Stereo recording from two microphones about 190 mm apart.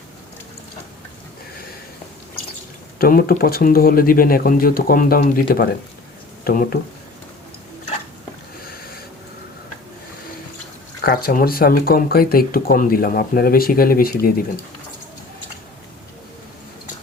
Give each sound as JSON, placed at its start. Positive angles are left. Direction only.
{"t": 3.0, "sound": "speech", "side_deg": 50}
{"t": 11.0, "sound": "speech", "side_deg": 50}